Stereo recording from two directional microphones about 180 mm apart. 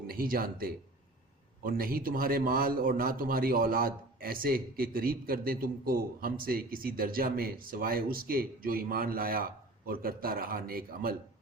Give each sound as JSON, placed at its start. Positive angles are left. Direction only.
{"t": 0.1, "sound": "a man's voice", "side_deg": -55}